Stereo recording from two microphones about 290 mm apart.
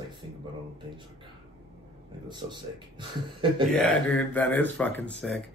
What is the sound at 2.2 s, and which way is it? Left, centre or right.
Speech, centre.